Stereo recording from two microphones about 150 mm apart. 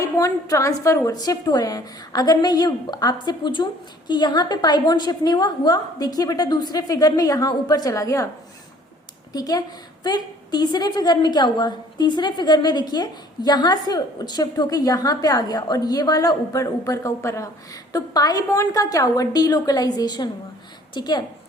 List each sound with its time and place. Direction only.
0.0 s a woman's voice: 20° left (ahead or behind)
9.3 s a woman's voice: 25° left (ahead or behind)